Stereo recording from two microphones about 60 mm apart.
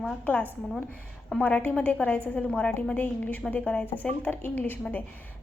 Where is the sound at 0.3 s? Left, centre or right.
Left.